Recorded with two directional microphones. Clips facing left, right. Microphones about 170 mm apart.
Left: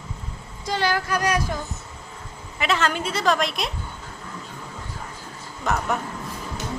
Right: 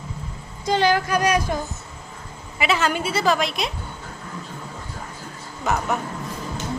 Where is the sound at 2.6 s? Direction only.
5° right (ahead or behind).